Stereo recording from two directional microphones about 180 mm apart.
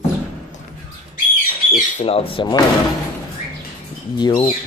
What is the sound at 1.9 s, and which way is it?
Speech, 35° left (ahead or behind).